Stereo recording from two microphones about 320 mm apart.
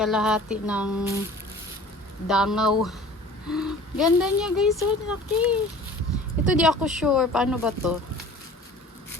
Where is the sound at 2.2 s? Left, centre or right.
Centre.